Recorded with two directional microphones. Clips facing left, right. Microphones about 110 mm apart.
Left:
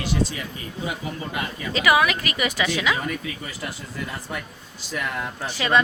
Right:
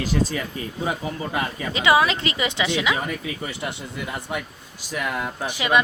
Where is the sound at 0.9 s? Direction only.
30° right (ahead or behind).